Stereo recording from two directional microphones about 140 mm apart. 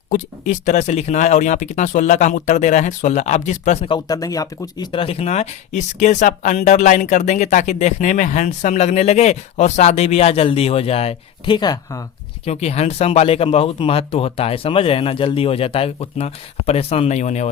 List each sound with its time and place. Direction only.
0.1 s speech: 60° left (ahead or behind)
3.8 s speech: 30° left (ahead or behind)
12.5 s speech: 50° left (ahead or behind)